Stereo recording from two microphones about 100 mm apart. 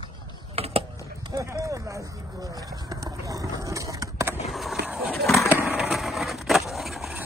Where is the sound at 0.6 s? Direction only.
90° right.